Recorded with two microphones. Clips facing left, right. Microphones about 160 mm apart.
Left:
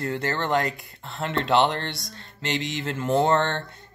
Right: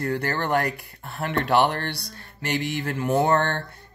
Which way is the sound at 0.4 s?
20° left (ahead or behind).